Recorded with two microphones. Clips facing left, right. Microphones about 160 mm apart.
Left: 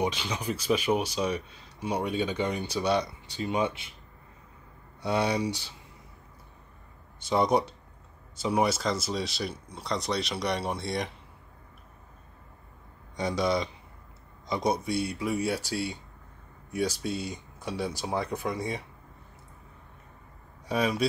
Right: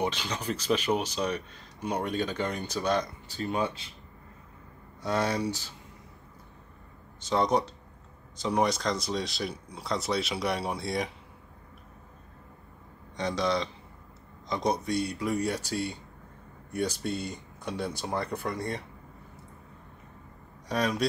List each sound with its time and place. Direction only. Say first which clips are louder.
0.3 s speech: left 1 dB; 10° left (ahead or behind)
5.0 s speech: left 1 dB; 10° left (ahead or behind)
7.2 s speech: left 1 dB; 10° left (ahead or behind)
13.1 s speech: left 1 dB; 10° left (ahead or behind)
17.0 s speech: even; 5° left (ahead or behind)
20.6 s speech: left 1 dB; 5° left (ahead or behind)